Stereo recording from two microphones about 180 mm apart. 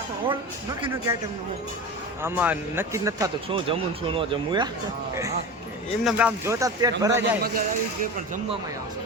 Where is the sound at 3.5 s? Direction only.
30° right (ahead or behind).